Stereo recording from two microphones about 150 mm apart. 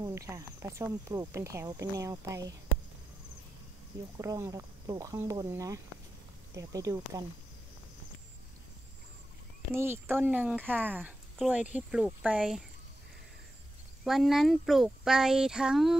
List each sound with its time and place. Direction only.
0.0 s speech: 20° right (ahead or behind)
4.2 s speech: 20° right (ahead or behind)
9.8 s speech: 15° right (ahead or behind)
14.0 s speech: centre (ahead or behind)